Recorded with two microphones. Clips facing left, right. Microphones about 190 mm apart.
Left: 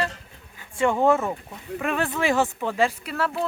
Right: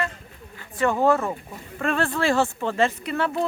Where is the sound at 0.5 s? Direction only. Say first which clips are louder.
Left 1 dB; 15° left (ahead or behind).